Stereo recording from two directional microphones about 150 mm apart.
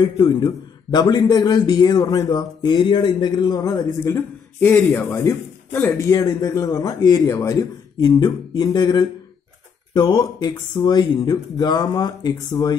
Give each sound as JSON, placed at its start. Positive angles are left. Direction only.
{"t": 0.0, "sound": "speech", "side_deg": 25}